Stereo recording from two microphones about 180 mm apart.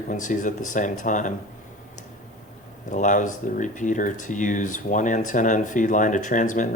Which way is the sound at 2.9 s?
45° left (ahead or behind).